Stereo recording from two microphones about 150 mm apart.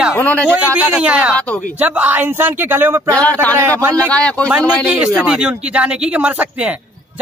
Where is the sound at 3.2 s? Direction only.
10° left (ahead or behind).